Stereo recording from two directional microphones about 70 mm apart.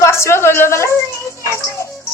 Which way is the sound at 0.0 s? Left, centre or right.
Left.